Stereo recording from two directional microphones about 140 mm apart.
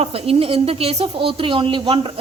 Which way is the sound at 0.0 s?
45° right (ahead or behind).